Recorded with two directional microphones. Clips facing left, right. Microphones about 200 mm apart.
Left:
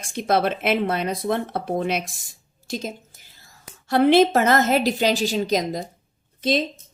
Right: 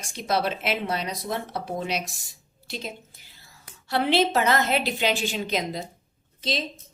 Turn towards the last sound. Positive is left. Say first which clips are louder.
# left 8 dB
turn(degrees=55)  # may be behind; listen again after turning